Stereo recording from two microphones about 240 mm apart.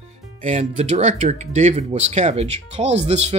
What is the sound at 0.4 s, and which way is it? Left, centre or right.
Speech, right.